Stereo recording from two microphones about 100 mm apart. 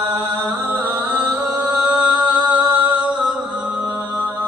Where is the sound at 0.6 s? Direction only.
20° right (ahead or behind).